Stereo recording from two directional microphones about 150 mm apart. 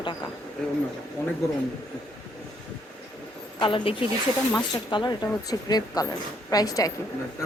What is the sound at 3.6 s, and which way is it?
Speech, 35° left (ahead or behind).